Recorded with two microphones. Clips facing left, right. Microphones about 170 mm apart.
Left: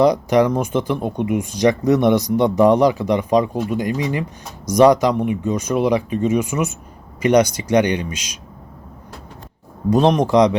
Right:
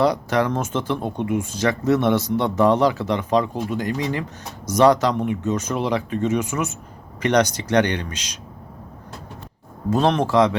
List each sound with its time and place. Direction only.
0.0 s speech: 15° left (ahead or behind)
9.9 s speech: 15° left (ahead or behind)